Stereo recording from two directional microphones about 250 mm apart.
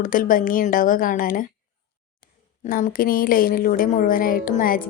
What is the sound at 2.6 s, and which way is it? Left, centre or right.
Speech, left.